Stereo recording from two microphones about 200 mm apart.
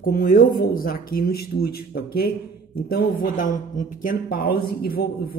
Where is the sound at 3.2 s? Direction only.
40° left (ahead or behind).